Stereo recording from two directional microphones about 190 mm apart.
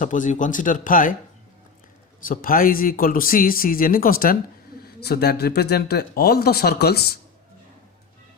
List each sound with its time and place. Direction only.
0.0 s speech: 45° left (ahead or behind)
2.2 s speech: 45° left (ahead or behind)